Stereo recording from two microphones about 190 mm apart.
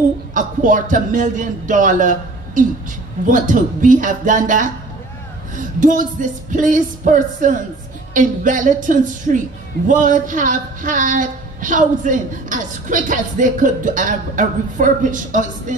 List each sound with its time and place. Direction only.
0.3 s speech: 45° right (ahead or behind)